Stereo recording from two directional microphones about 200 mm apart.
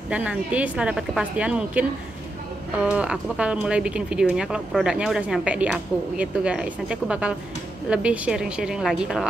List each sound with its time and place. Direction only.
0.1 s speech: 5° right (ahead or behind)